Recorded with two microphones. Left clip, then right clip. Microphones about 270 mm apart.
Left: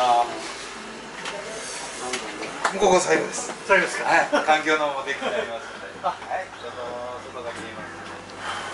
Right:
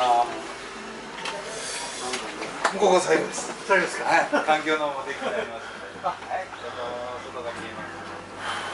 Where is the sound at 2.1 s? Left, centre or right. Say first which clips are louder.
Left 1 dB; centre.